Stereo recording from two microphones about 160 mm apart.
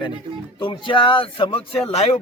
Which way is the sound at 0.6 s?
35° left (ahead or behind).